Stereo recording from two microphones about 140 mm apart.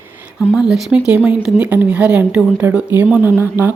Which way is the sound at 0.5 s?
5° right (ahead or behind).